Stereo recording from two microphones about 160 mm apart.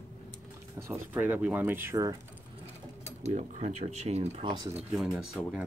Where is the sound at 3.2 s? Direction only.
45° right (ahead or behind).